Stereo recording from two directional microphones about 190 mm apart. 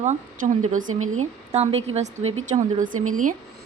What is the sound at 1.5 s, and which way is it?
Speech, 35° right (ahead or behind).